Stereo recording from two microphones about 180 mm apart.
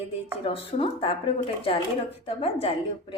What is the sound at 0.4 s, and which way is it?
A woman's voice, 30° left (ahead or behind).